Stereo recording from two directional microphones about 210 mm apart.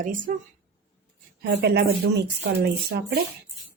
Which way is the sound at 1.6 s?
50° right (ahead or behind).